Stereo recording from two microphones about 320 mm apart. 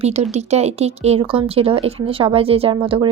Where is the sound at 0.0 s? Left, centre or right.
Centre.